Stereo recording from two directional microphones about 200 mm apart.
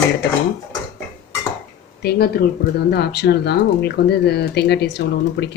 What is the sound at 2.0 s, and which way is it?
Speech, 50° left (ahead or behind).